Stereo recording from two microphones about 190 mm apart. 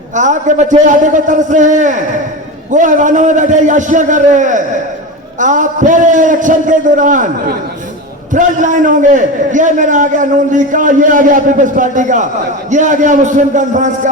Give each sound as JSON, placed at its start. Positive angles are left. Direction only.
{"t": 0.1, "sound": "a man's voice", "side_deg": -40}